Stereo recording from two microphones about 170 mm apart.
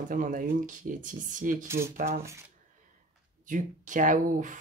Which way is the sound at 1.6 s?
15° right (ahead or behind).